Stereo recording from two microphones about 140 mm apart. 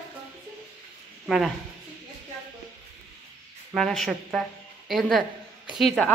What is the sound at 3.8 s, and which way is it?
A man's voice, centre (ahead or behind).